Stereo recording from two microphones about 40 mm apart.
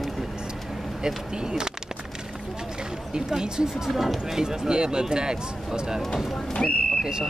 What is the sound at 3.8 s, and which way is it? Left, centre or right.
Speech, centre.